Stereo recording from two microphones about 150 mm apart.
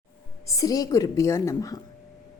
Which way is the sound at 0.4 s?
20° left (ahead or behind).